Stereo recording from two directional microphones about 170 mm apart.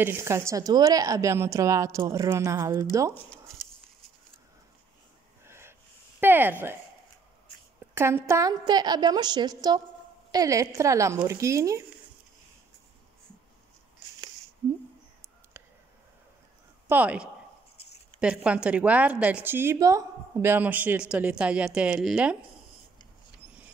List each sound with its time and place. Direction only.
0.0 s a woman's voice: 15° right (ahead or behind)
5.4 s snort: 15° right (ahead or behind)
6.2 s a woman's voice: 10° right (ahead or behind)
7.9 s a woman's voice: 15° right (ahead or behind)
16.8 s a woman's voice: 10° right (ahead or behind)